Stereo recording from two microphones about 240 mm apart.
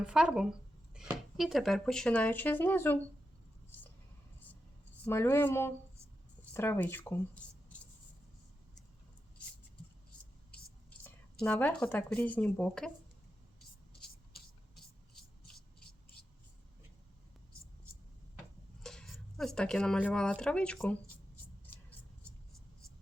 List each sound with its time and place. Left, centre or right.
0.0 s speech: centre
5.0 s speech: centre
11.0 s speech: centre
15.1 s a sound: centre
18.8 s speech: centre